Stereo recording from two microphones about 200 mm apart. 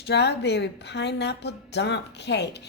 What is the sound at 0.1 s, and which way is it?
A woman's voice, 55° left (ahead or behind).